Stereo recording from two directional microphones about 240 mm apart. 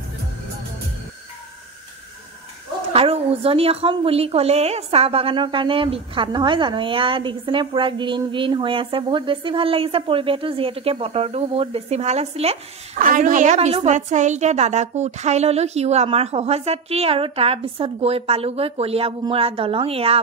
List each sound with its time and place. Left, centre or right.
2.9 s a woman's voice: right